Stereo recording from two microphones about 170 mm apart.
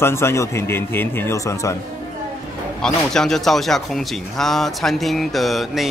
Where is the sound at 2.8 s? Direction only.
5° left (ahead or behind).